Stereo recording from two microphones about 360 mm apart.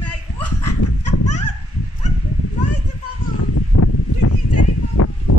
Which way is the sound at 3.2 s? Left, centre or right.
Left.